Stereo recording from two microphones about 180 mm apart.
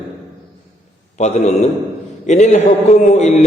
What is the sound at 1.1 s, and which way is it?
A man's voice, 40° left (ahead or behind).